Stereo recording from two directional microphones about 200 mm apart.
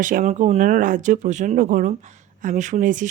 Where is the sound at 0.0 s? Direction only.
40° right (ahead or behind).